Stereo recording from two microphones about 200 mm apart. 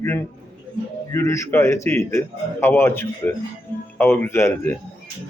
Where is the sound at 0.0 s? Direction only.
10° left (ahead or behind).